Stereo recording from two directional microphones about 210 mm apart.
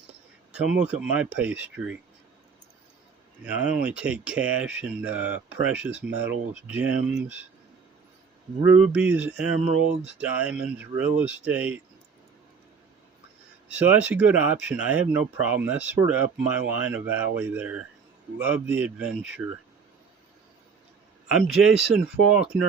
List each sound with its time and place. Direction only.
0.5 s speech: 5° right (ahead or behind)
3.4 s speech: 5° right (ahead or behind)
8.6 s speech: 5° right (ahead or behind)
13.7 s speech: 10° right (ahead or behind)
21.2 s speech: centre (ahead or behind)
22.5 s speech: 50° right (ahead or behind)